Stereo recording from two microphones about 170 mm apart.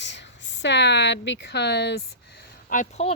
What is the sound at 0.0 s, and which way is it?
Speech, 90° left.